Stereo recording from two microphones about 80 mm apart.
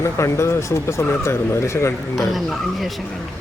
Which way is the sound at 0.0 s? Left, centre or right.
Left.